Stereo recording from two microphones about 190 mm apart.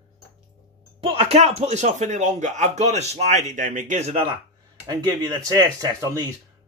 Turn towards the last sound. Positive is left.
turn(degrees=-20)  # may be behind; listen again after turning